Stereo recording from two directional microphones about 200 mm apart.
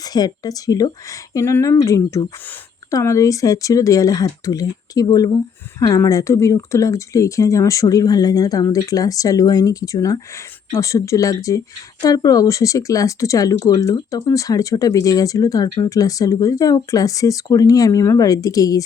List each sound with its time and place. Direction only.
0.0 s speech: 20° left (ahead or behind)